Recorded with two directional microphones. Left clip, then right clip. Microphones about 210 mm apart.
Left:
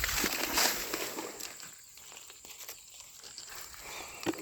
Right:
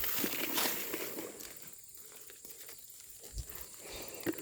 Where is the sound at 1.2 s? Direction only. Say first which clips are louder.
Left 4 dB; 25° left (ahead or behind).